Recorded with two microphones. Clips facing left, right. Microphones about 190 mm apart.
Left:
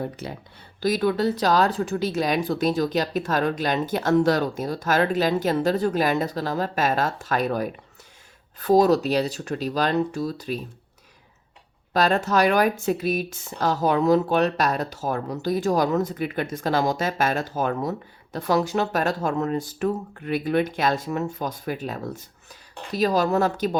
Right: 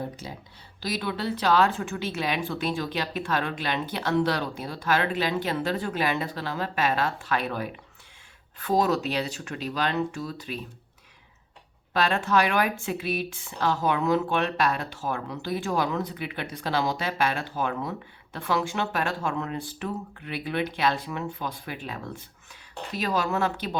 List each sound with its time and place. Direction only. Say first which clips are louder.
0.2 s speech: left 5 dB; 60° left (ahead or behind)
0.8 s speech: left 9 dB; 50° left (ahead or behind)
11.9 s speech: left 3 dB; 40° left (ahead or behind)